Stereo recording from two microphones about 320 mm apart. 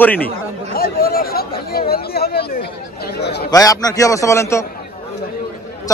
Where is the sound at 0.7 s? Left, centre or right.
Left.